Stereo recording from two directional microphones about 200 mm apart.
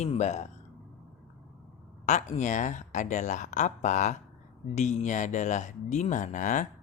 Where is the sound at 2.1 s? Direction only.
35° left (ahead or behind).